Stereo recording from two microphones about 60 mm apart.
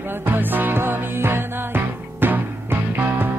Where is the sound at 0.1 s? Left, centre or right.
Right.